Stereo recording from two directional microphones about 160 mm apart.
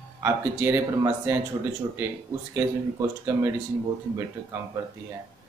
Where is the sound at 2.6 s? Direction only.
15° right (ahead or behind).